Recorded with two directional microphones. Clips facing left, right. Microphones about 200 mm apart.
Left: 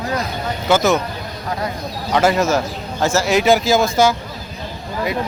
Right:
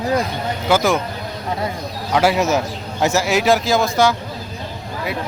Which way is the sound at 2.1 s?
5° right (ahead or behind).